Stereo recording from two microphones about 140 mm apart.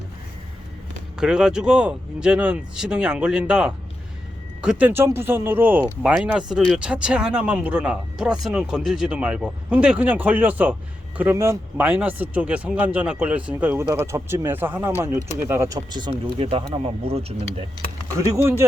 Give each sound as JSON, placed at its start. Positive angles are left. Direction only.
{"t": 1.2, "sound": "speech", "side_deg": -5}
{"t": 15.9, "sound": "speech", "side_deg": -30}